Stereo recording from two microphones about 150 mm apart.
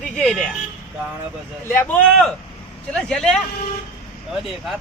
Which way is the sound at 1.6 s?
15° left (ahead or behind).